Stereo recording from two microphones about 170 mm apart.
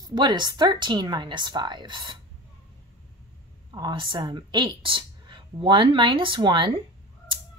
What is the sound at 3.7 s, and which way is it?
Speech, 25° right (ahead or behind).